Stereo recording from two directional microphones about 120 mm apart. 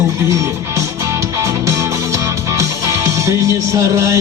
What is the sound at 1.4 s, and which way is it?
Music, 25° right (ahead or behind).